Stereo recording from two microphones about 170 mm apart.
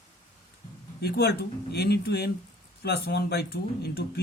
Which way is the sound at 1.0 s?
70° left (ahead or behind).